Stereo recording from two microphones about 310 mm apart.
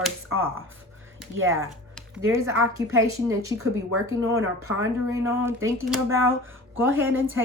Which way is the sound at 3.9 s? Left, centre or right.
Right.